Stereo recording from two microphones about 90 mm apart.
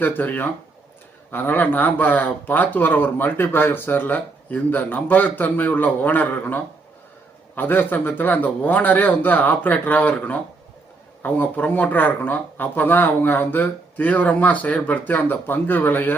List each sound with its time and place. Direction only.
0.0 s speech: 20° left (ahead or behind)